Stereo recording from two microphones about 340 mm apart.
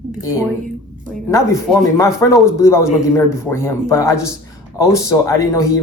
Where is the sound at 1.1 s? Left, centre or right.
Centre.